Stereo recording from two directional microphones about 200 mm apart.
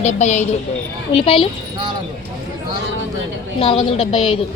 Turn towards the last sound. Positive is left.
turn(degrees=30)  # may be behind; listen again after turning